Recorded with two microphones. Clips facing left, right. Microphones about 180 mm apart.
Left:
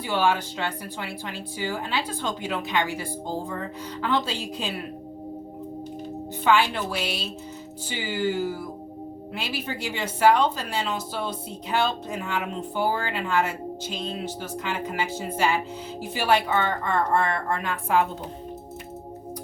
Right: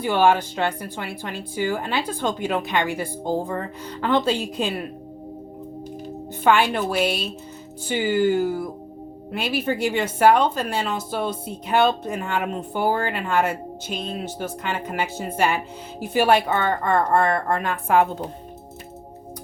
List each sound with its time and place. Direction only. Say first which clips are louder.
0.0 s a woman's voice: right 5 dB; 50° right (ahead or behind)
6.4 s a woman's voice: right 3 dB; 50° right (ahead or behind)